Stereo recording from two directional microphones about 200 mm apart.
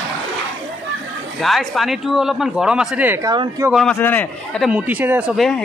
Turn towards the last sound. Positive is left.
turn(degrees=0)  # may be behind; listen again after turning